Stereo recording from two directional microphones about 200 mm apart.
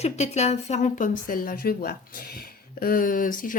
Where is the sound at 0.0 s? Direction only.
35° left (ahead or behind).